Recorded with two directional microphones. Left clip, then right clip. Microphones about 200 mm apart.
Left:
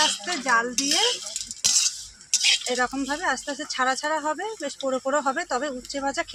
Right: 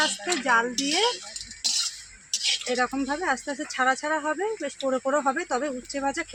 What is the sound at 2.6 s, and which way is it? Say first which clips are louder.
Speech: left 1 dB; 35° right (ahead or behind).